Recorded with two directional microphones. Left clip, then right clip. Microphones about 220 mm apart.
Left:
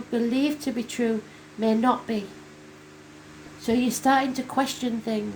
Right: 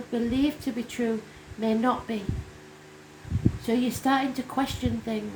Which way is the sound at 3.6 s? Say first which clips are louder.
Left 5 dB; 25° left (ahead or behind).